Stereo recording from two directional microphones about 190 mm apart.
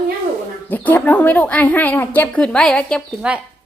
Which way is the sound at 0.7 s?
10° left (ahead or behind).